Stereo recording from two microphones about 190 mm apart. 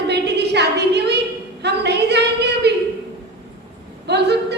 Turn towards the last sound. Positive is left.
turn(degrees=-60)  # may be behind; listen again after turning